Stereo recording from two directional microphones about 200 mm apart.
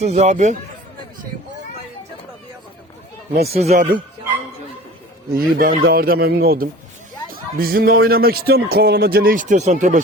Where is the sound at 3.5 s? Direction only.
30° right (ahead or behind).